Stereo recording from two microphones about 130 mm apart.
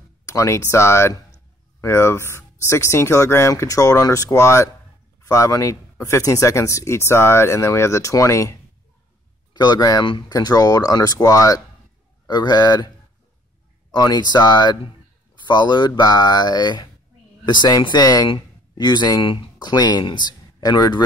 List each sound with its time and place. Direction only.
0.2 s speech: 25° left (ahead or behind)
13.9 s speech: 30° left (ahead or behind)